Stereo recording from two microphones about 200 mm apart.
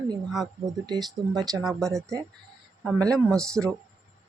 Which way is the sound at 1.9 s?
15° right (ahead or behind).